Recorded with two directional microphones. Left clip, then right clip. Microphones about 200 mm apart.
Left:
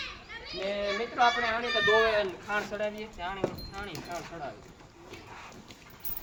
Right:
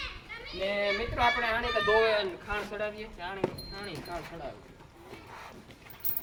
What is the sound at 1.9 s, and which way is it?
Speech, 15° right (ahead or behind).